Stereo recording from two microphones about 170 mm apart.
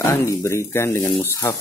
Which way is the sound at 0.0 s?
15° left (ahead or behind).